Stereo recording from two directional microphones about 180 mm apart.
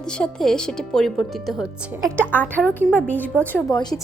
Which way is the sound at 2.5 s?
10° left (ahead or behind).